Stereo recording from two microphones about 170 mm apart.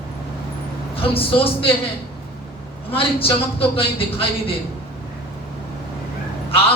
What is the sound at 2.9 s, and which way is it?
A man's voice, 35° left (ahead or behind).